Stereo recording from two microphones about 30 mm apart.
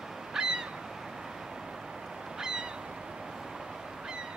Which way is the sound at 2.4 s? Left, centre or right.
Right.